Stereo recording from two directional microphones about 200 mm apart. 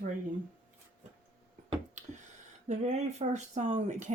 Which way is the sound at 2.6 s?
35° right (ahead or behind).